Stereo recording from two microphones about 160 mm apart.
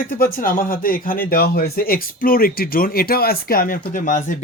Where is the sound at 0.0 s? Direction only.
60° left (ahead or behind).